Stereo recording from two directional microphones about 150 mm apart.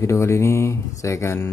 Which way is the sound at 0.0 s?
20° left (ahead or behind).